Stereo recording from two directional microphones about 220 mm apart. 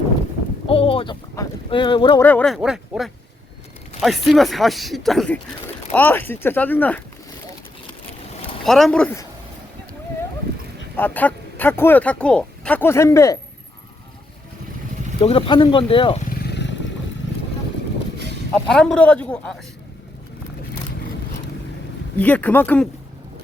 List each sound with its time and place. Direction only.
0.7 s speech: 25° left (ahead or behind)
2.2 s speech: 5° left (ahead or behind)
4.3 s speech: centre (ahead or behind)
8.6 s speech: centre (ahead or behind)
10.9 s speech: 10° left (ahead or behind)
15.2 s speech: 25° left (ahead or behind)
16.5 s a sound: 50° left (ahead or behind)
18.5 s speech: 5° left (ahead or behind)
22.2 s speech: 5° left (ahead or behind)